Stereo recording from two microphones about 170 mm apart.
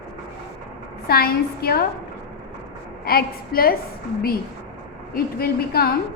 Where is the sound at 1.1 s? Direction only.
65° left (ahead or behind).